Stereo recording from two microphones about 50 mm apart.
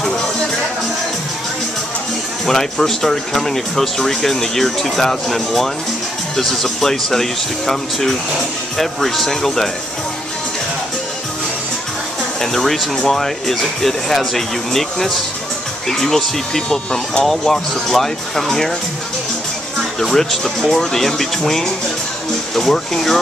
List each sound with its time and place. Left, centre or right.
2.4 s speech: centre
12.4 s speech: centre
19.8 s speech: centre